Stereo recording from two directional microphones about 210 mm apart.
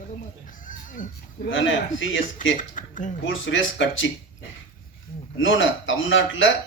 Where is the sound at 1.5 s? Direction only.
65° left (ahead or behind).